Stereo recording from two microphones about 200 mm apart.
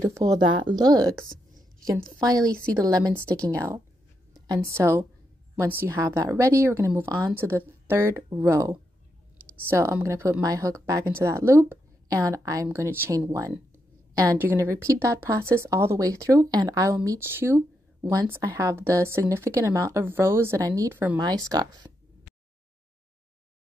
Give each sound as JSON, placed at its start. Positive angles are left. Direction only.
{"t": 0.1, "sound": "speech", "side_deg": -15}
{"t": 2.1, "sound": "a woman's voice", "side_deg": -20}
{"t": 4.6, "sound": "a woman's voice", "side_deg": -15}